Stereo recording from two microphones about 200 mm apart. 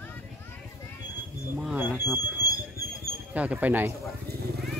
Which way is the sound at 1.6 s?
5° right (ahead or behind).